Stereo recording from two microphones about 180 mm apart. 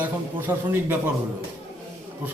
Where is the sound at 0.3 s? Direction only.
10° right (ahead or behind).